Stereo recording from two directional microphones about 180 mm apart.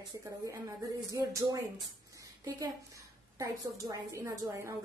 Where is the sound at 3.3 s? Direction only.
20° right (ahead or behind).